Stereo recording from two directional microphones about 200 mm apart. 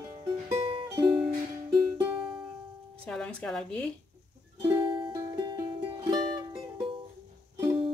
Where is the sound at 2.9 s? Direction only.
5° left (ahead or behind).